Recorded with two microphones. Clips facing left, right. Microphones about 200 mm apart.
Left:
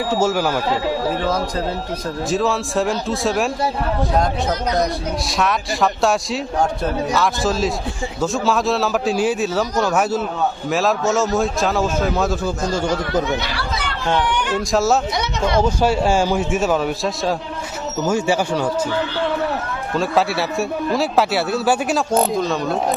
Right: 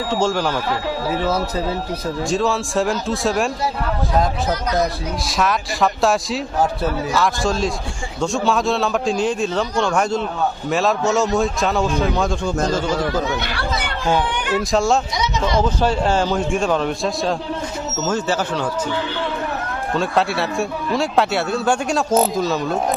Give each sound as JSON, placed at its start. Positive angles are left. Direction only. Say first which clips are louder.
{"t": 0.1, "sound": "a man's voice", "louder": "left 1 dB", "side_deg": 5}
{"t": 13.4, "sound": "chatter", "louder": "right 1 dB", "side_deg": -55}
{"t": 14.7, "sound": "a man's voice", "louder": "left 1 dB", "side_deg": 5}
{"t": 15.1, "sound": "a sound", "louder": "even", "side_deg": 60}
{"t": 15.6, "sound": "a man's voice", "louder": "left 1 dB", "side_deg": 10}
{"t": 20.0, "sound": "a man's voice", "louder": "left 1 dB", "side_deg": 0}